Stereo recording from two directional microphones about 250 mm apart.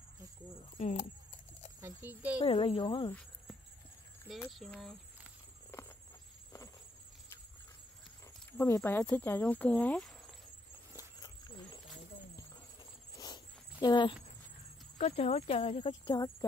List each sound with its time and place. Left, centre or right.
0.7 s speech: left
1.8 s a child's voice: centre
2.4 s speech: left
4.2 s speech: centre
5.7 s patter: centre
8.5 s speech: centre
11.0 s a sound: centre
13.2 s a sound: centre
15.0 s speech: left